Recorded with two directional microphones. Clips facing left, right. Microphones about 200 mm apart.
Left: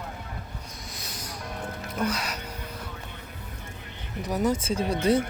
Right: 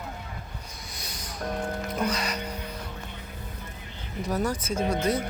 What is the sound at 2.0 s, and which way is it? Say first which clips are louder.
Speech: left 1 dB; 5° left (ahead or behind).